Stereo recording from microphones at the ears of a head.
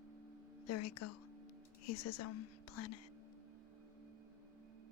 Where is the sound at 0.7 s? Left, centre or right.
Left.